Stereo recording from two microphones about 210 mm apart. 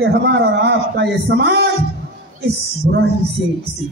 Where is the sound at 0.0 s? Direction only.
50° right (ahead or behind).